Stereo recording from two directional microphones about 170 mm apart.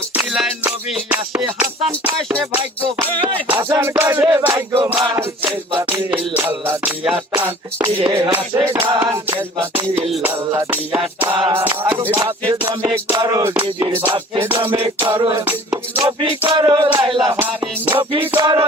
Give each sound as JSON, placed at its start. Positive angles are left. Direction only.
{"t": 0.1, "sound": "music", "side_deg": -10}
{"t": 11.3, "sound": "music", "side_deg": -30}
{"t": 11.5, "sound": "music", "side_deg": -10}
{"t": 15.1, "sound": "music", "side_deg": -20}
{"t": 16.0, "sound": "music", "side_deg": -30}
{"t": 17.3, "sound": "music", "side_deg": -10}
{"t": 17.9, "sound": "music", "side_deg": -30}